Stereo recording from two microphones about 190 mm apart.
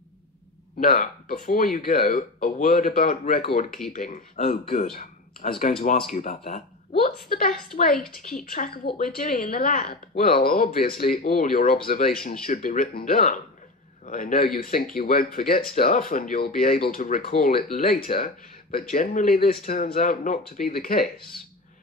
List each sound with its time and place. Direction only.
0.7 s a woman's voice: 50° left (ahead or behind)
7.9 s speech: centre (ahead or behind)
8.5 s a woman's voice: 50° left (ahead or behind)
17.3 s speech: 35° left (ahead or behind)
17.7 s a woman's voice: 50° left (ahead or behind)